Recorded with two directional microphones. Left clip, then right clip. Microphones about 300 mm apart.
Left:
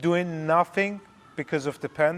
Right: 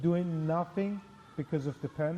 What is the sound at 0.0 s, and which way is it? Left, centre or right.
Speech, centre.